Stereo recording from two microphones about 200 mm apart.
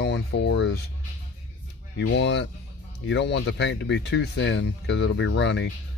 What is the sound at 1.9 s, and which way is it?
Speech, 60° left (ahead or behind).